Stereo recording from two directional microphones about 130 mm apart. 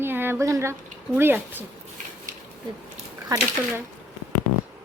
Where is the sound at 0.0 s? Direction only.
15° right (ahead or behind).